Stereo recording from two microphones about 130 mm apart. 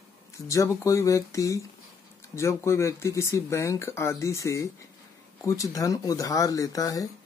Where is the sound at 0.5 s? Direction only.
25° left (ahead or behind).